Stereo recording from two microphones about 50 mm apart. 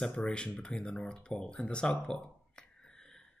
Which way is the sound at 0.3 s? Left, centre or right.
Left.